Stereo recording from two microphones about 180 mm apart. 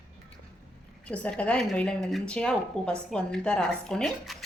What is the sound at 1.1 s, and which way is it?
A woman's voice, 5° left (ahead or behind).